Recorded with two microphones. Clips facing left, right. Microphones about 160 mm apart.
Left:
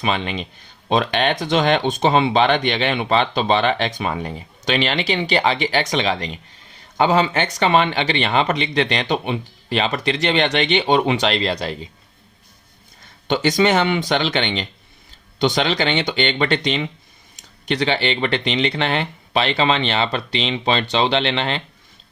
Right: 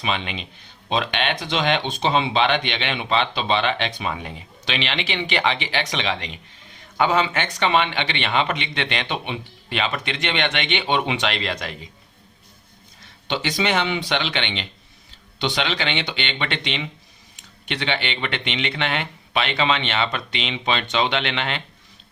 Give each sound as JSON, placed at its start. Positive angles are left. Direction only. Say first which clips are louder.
{"t": 0.0, "sound": "speech", "louder": "left 4 dB", "side_deg": 45}
{"t": 13.2, "sound": "speech", "louder": "left 7 dB", "side_deg": 45}